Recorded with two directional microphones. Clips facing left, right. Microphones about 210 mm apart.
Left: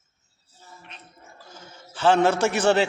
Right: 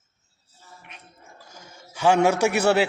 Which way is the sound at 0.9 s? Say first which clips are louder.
Even; 10° right (ahead or behind).